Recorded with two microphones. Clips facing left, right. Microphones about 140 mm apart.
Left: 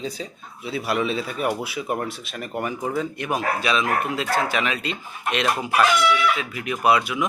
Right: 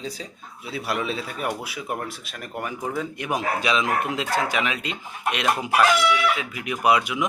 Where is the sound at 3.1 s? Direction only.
15° right (ahead or behind).